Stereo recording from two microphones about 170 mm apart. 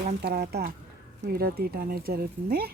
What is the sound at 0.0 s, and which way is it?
Speech, 70° right (ahead or behind).